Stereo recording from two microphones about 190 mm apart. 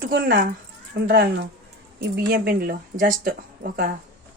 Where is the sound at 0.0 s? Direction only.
50° right (ahead or behind).